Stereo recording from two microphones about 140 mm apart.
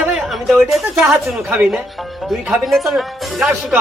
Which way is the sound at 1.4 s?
15° right (ahead or behind).